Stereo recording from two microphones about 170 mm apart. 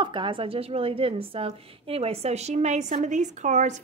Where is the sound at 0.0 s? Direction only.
30° right (ahead or behind).